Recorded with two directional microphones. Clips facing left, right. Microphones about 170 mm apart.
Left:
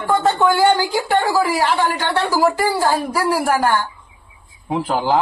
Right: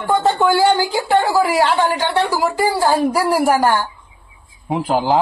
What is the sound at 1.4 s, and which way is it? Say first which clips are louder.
A woman's voice: right 2 dB; 20° right (ahead or behind).